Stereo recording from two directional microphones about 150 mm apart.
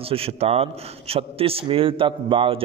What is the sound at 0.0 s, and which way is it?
A man's voice, 40° right (ahead or behind).